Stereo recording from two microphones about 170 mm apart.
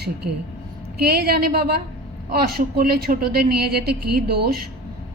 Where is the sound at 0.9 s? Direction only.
65° right (ahead or behind).